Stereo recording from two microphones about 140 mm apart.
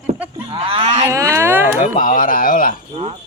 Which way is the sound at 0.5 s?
40° right (ahead or behind).